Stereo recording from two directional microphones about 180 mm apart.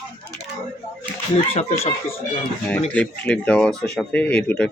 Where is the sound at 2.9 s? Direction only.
5° left (ahead or behind).